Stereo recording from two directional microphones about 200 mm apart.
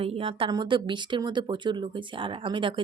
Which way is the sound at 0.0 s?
30° right (ahead or behind).